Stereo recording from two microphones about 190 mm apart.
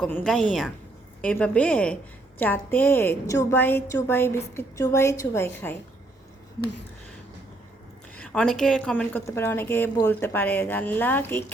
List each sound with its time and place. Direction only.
0.0 s a woman's voice: 5° left (ahead or behind)
8.1 s a woman's voice: 5° left (ahead or behind)